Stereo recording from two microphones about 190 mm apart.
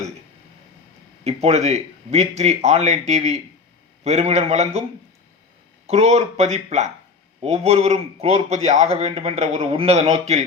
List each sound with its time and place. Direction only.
1.2 s a man's voice: 35° right (ahead or behind)
5.8 s a man's voice: 35° right (ahead or behind)